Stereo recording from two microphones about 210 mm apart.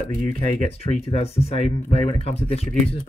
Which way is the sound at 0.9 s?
30° left (ahead or behind).